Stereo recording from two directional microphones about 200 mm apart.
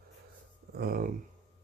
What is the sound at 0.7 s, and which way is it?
Speech, 50° right (ahead or behind).